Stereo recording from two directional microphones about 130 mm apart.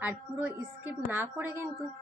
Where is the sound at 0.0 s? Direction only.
10° right (ahead or behind).